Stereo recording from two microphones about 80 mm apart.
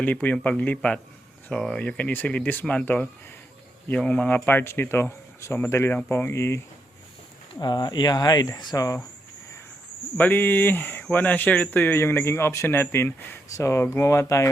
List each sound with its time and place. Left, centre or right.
0.0 s speech: centre
1.8 s speech: centre; by 6.6 s left
7.6 s speech: left
10.2 s speech: left